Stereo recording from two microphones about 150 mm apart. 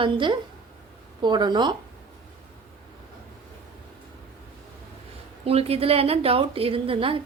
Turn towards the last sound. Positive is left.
turn(degrees=-35)  # may be behind; listen again after turning